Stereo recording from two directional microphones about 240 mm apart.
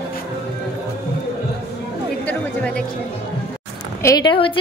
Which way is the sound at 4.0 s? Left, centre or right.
Centre.